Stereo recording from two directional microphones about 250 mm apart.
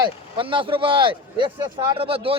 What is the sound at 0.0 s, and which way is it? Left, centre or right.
Speech, centre.